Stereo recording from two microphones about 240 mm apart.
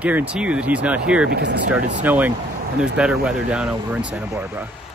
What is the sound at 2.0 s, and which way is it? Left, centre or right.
Speech, centre.